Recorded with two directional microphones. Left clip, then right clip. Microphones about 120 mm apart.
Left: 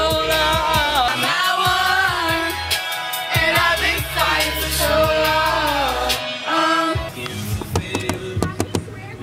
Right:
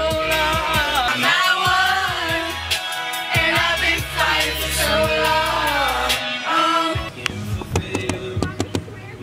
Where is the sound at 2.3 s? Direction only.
5° left (ahead or behind).